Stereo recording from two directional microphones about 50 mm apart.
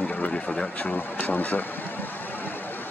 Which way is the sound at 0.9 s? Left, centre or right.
Left.